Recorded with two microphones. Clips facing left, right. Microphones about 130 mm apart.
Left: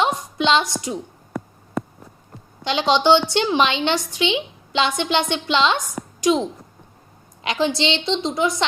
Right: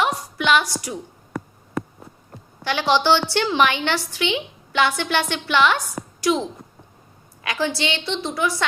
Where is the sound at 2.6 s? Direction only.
20° left (ahead or behind).